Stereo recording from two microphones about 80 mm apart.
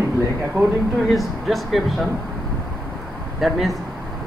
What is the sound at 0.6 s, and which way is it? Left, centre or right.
Speech, right.